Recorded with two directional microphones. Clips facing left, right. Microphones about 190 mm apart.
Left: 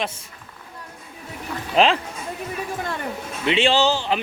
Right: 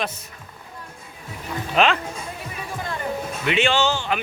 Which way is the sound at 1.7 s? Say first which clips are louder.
Left 2 dB; 30° left (ahead or behind).